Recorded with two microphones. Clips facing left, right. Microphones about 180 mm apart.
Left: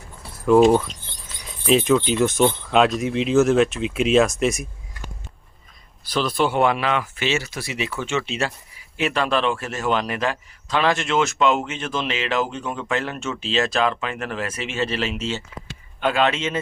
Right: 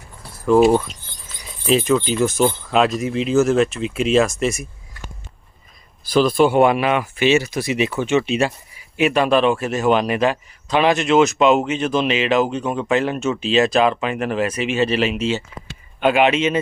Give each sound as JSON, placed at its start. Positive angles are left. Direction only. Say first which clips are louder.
{"t": 0.2, "sound": "speech", "louder": "right 1 dB", "side_deg": 0}
{"t": 6.1, "sound": "a man's voice", "louder": "right 7 dB", "side_deg": -10}